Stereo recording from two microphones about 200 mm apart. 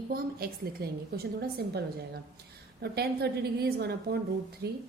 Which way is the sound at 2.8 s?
55° right (ahead or behind).